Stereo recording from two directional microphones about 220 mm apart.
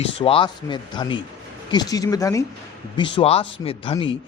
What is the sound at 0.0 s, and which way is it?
A man's voice, 25° left (ahead or behind).